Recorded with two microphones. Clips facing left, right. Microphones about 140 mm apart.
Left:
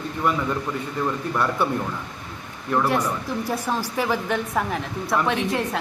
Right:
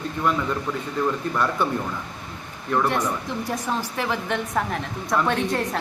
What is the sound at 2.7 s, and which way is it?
A man's voice, 5° left (ahead or behind).